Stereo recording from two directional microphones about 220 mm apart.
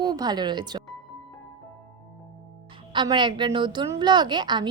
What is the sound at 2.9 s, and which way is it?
A woman's voice, 20° right (ahead or behind).